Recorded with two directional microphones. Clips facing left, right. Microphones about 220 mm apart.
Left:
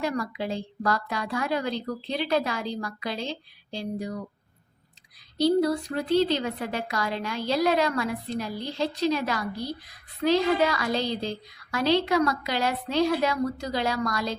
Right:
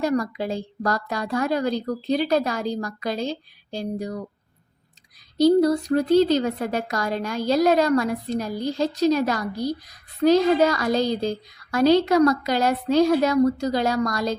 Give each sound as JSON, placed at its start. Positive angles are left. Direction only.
{"t": 0.0, "sound": "a woman's voice", "side_deg": -40}
{"t": 5.4, "sound": "a woman's voice", "side_deg": -45}